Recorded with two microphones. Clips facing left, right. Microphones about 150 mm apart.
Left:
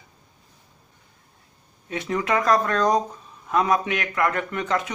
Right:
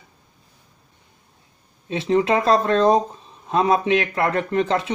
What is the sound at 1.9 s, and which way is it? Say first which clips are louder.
Speech: right 6 dB; 25° right (ahead or behind).